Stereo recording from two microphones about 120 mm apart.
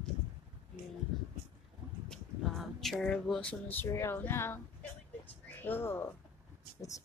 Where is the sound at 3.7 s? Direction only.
20° left (ahead or behind).